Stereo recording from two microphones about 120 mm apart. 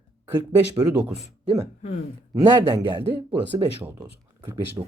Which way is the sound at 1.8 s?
70° left (ahead or behind).